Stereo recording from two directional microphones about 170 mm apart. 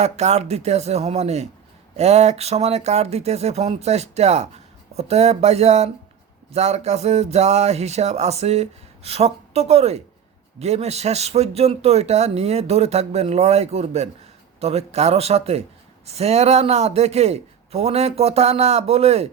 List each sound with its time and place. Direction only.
0.0 s speech: 40° right (ahead or behind)